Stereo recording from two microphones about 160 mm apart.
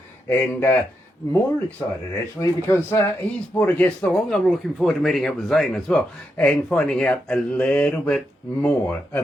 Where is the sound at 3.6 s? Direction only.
10° left (ahead or behind).